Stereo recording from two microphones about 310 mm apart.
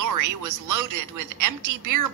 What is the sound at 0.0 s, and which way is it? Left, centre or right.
A woman's voice, right.